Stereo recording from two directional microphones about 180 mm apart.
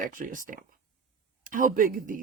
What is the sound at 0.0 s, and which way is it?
Speech, 50° right (ahead or behind).